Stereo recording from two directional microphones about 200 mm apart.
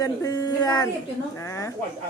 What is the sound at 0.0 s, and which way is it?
Speech, 20° left (ahead or behind).